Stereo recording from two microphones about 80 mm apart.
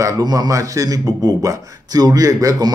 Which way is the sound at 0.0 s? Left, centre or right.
Right.